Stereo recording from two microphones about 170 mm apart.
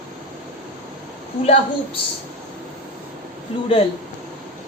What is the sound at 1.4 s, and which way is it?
Speech, 35° left (ahead or behind).